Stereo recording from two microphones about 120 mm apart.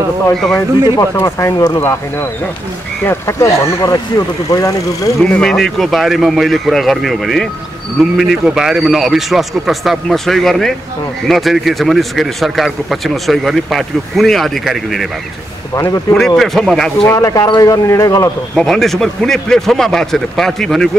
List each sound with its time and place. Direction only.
0.9 s speech: 25° left (ahead or behind)
5.2 s speech: 5° left (ahead or behind)
15.7 s speech: 25° left (ahead or behind)
16.2 s speech: 5° left (ahead or behind)
17.1 s speech: 25° left (ahead or behind)
18.6 s speech: 5° left (ahead or behind)